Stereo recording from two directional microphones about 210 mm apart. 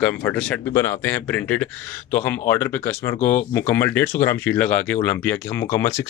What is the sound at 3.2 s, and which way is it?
Speech, 40° left (ahead or behind).